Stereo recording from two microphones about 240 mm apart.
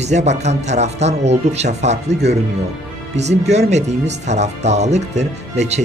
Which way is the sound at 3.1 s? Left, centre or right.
Right.